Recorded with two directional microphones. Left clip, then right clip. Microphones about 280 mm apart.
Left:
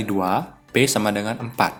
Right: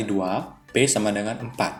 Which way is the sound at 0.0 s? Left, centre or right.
Left.